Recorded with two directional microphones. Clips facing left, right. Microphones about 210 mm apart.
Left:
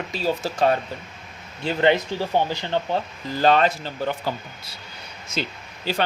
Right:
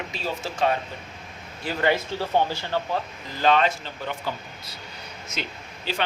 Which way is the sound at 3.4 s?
40° left (ahead or behind).